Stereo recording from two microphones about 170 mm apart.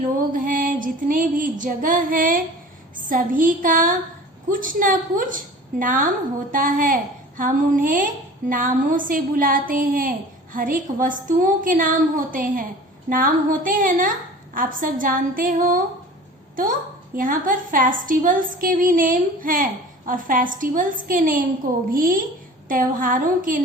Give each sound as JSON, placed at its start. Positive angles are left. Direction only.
{"t": 0.3, "sound": "a woman's voice", "side_deg": -55}
{"t": 17.2, "sound": "a woman's voice", "side_deg": -50}